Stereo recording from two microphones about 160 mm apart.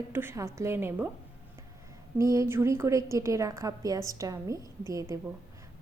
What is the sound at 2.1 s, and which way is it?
A woman's voice, 20° right (ahead or behind).